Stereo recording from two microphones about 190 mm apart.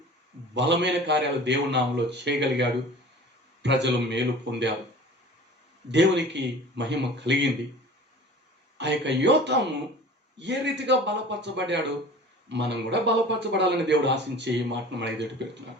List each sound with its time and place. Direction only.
0.5 s a man's voice: 65° right (ahead or behind)
5.9 s a man's voice: 65° right (ahead or behind)
8.8 s a man's voice: 65° right (ahead or behind)